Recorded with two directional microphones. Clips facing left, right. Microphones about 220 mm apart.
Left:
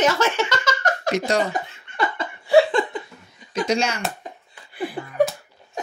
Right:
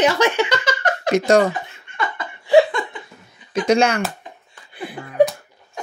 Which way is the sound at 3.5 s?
55° right (ahead or behind).